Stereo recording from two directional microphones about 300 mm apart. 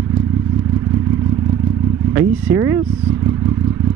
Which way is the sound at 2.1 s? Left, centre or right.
Centre.